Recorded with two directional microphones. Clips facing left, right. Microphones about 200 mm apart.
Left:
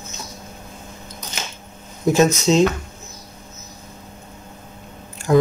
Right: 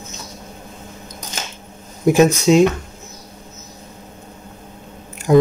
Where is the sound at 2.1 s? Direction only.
15° right (ahead or behind).